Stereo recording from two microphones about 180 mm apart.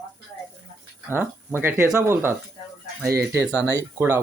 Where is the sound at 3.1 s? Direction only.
60° right (ahead or behind).